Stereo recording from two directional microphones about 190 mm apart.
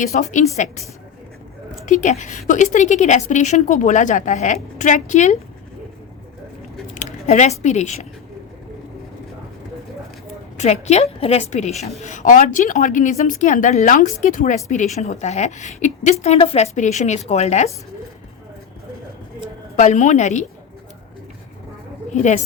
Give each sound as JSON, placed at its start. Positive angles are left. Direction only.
{"t": 0.0, "sound": "a woman's voice", "side_deg": 40}
{"t": 1.9, "sound": "a woman's voice", "side_deg": 40}
{"t": 6.9, "sound": "squish", "side_deg": 40}
{"t": 7.6, "sound": "a woman's voice", "side_deg": 35}
{"t": 10.6, "sound": "a woman's voice", "side_deg": 35}
{"t": 19.7, "sound": "a woman's voice", "side_deg": 40}
{"t": 22.1, "sound": "a woman's voice", "side_deg": 40}